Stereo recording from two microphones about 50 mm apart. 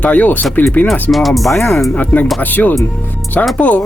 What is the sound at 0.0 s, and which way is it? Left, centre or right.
Speech, left.